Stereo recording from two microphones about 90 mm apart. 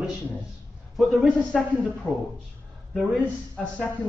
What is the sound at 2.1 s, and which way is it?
Speech, 15° left (ahead or behind).